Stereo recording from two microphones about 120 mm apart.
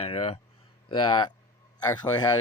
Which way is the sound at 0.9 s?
40° left (ahead or behind).